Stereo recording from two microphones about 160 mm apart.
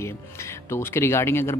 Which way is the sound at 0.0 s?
15° left (ahead or behind).